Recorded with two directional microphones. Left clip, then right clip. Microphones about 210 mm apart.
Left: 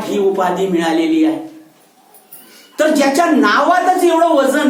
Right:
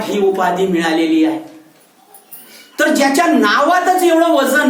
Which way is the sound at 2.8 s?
20° right (ahead or behind).